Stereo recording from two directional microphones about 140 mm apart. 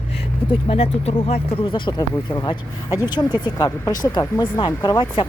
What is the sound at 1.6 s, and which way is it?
Speech, 35° left (ahead or behind).